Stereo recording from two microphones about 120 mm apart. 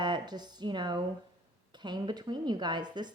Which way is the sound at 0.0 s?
35° right (ahead or behind).